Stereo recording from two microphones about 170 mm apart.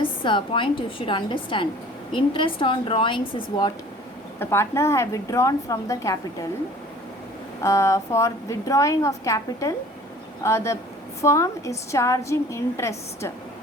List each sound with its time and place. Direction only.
0.0 s a woman's voice: 30° left (ahead or behind)
4.4 s a woman's voice: 15° left (ahead or behind)
7.6 s a woman's voice: 15° left (ahead or behind)